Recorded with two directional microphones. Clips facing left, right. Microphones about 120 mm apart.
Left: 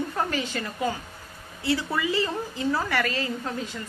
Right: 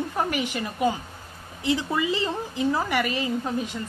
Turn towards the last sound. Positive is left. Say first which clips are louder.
# right 4 dB
turn(degrees=-20)  # may be behind; listen again after turning